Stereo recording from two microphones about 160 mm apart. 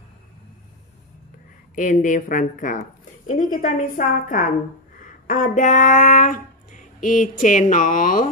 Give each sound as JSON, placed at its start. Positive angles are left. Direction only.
{"t": 1.8, "sound": "a woman's voice", "side_deg": 55}
{"t": 5.2, "sound": "a sound", "side_deg": 55}
{"t": 6.0, "sound": "speech", "side_deg": 60}